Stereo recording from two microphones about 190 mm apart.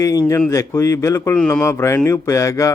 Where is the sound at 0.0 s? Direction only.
15° left (ahead or behind).